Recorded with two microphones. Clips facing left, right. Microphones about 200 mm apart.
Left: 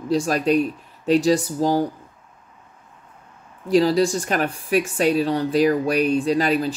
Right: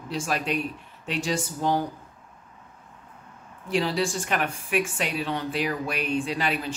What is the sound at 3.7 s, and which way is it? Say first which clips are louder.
A woman's voice: left 8 dB; 40° left (ahead or behind).